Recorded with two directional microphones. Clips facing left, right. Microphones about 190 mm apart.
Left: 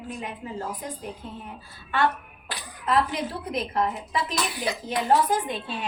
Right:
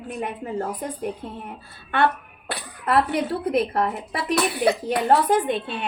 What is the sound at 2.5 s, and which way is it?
A woman's voice, 65° right (ahead or behind).